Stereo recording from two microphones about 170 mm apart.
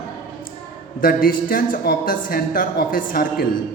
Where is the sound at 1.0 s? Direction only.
55° left (ahead or behind).